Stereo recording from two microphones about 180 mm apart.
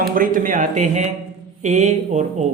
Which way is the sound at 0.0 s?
50° right (ahead or behind).